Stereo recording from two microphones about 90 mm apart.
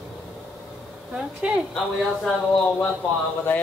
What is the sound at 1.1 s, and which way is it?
Speech, 10° right (ahead or behind).